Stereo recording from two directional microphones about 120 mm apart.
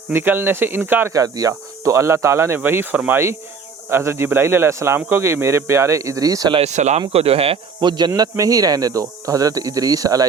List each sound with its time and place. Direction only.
0.1 s speech: 20° right (ahead or behind)
1.1 s speech: 30° right (ahead or behind)
6.7 s speech: 75° right (ahead or behind)
7.1 s speech: 55° right (ahead or behind)
7.8 s a man's voice: 40° right (ahead or behind)